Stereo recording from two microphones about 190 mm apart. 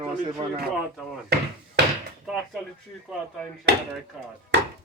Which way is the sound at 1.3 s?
60° right (ahead or behind).